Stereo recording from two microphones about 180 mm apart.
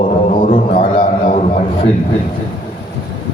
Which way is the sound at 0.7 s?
50° left (ahead or behind).